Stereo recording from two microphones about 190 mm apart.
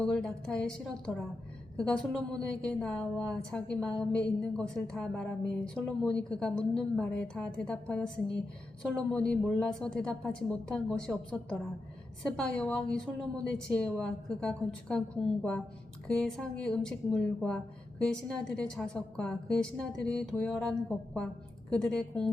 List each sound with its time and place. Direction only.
0.0 s a woman's voice: 5° left (ahead or behind)